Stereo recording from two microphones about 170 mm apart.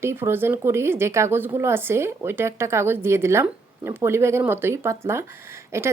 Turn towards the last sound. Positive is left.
turn(degrees=-15)  # may be behind; listen again after turning